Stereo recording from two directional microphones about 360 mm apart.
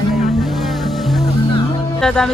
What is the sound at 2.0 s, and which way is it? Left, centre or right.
Speech, centre.